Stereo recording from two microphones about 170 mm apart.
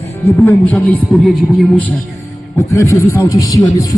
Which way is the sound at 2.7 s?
15° left (ahead or behind).